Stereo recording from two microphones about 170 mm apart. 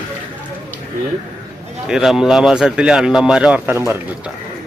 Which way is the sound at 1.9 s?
5° right (ahead or behind).